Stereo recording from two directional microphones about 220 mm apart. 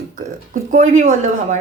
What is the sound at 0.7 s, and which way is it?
Speech, 35° right (ahead or behind).